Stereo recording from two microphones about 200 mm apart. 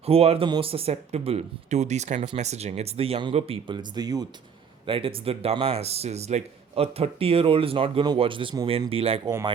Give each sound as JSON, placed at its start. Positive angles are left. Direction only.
{"t": 0.0, "sound": "speech", "side_deg": -30}